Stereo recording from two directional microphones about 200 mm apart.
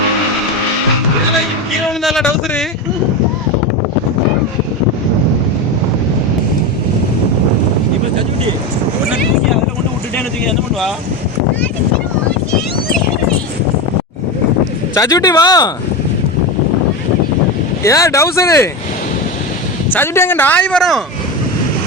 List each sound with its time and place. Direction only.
2.0 s speech: centre (ahead or behind)
10.2 s boat: centre (ahead or behind)
14.9 s speech: 20° left (ahead or behind)
17.8 s speech: 15° left (ahead or behind)
19.9 s speech: 10° left (ahead or behind)